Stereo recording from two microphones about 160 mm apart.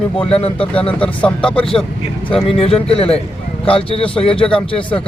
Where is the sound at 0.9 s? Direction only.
5° left (ahead or behind).